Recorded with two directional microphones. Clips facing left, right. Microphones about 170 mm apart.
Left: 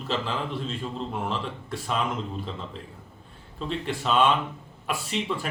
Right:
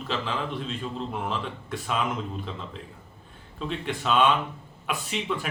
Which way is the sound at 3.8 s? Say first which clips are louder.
Even; centre (ahead or behind).